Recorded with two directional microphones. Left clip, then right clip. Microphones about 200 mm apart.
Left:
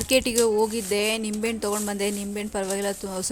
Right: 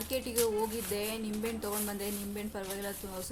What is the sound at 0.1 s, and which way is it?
Speech, 40° left (ahead or behind).